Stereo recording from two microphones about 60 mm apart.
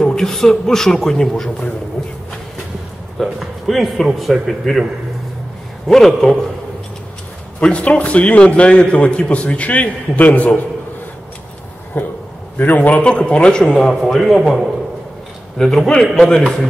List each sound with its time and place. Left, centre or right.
0.0 s a man's voice: centre
3.2 s speech: centre
5.9 s speech: centre
7.6 s a man's voice: left
11.9 s a man's voice: left; by 13.7 s centre
14.0 s a man's voice: centre